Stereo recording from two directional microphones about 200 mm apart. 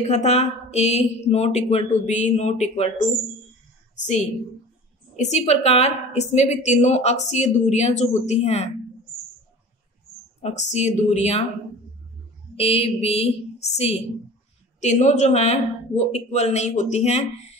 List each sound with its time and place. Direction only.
0.0 s a woman's voice: 35° left (ahead or behind)
4.0 s a woman's voice: 35° left (ahead or behind)
10.4 s a woman's voice: 35° left (ahead or behind)
12.5 s a woman's voice: 30° left (ahead or behind)